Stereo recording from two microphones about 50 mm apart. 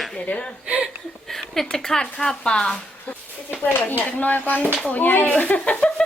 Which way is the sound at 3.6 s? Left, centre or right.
Left.